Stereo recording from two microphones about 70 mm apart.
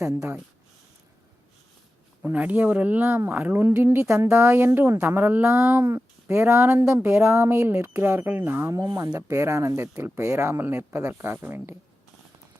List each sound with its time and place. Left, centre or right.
0.0 s speech: right
2.2 s speech: right
3.1 s speech: right
5.5 s speech: right
8.7 s speech: right